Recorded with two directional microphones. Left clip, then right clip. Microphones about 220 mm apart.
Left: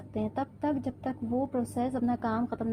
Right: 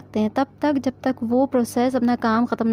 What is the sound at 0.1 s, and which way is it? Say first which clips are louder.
A woman's voice: right 11 dB; 35° right (ahead or behind).